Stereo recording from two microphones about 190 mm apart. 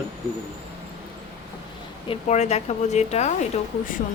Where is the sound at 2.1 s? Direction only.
35° left (ahead or behind).